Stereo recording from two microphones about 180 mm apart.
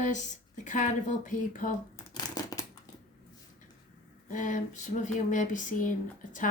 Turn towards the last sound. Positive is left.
turn(degrees=45)  # may be behind; listen again after turning